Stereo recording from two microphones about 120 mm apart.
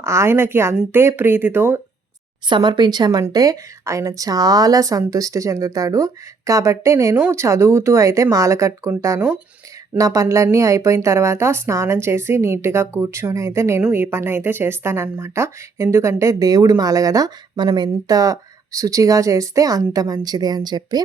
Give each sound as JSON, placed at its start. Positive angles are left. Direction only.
{"t": 0.0, "sound": "speech", "side_deg": -20}
{"t": 2.5, "sound": "speech", "side_deg": -40}